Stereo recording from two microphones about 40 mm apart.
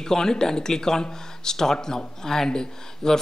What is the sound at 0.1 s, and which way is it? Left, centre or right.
Speech, centre.